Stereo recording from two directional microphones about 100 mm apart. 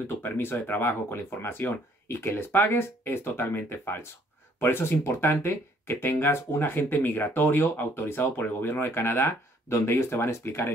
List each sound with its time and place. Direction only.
0.2 s speech: 20° left (ahead or behind)